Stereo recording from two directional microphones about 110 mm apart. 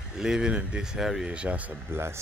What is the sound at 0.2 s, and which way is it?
Speech, 5° right (ahead or behind).